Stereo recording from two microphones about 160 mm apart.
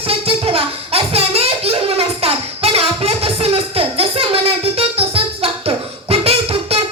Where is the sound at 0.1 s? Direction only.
35° right (ahead or behind).